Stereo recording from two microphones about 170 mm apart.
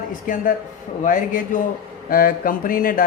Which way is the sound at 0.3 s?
50° left (ahead or behind).